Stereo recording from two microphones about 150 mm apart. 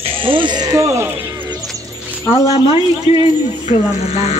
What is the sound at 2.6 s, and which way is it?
Speech, 25° right (ahead or behind).